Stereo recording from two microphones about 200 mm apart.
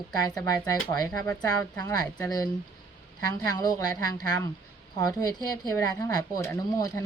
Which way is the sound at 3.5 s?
20° left (ahead or behind).